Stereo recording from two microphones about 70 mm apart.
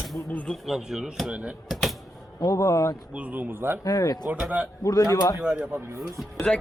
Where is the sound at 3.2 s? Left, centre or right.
Right.